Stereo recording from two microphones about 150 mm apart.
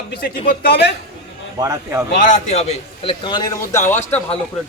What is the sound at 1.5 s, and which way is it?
Speech, 20° right (ahead or behind).